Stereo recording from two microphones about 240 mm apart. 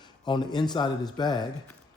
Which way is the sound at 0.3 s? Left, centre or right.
Centre.